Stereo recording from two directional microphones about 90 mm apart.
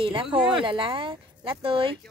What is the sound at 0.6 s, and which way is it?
Speech, 70° right (ahead or behind).